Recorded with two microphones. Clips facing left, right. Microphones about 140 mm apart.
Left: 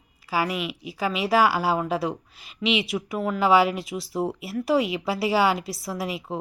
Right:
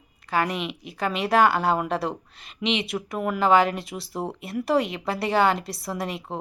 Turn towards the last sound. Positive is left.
turn(degrees=0)  # may be behind; listen again after turning